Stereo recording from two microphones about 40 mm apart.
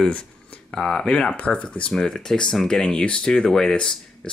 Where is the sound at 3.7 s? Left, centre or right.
Left.